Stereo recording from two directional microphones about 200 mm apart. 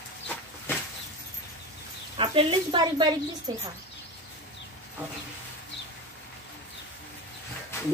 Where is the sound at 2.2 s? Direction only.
25° right (ahead or behind).